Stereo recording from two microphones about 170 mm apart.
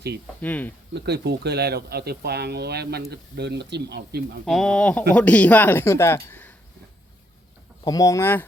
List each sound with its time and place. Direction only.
0.4 s speech: 10° left (ahead or behind)
0.9 s speech: 75° right (ahead or behind)
4.4 s speech: centre (ahead or behind)
7.9 s speech: 20° left (ahead or behind)